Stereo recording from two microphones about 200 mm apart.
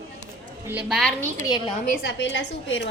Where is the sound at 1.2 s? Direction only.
20° left (ahead or behind).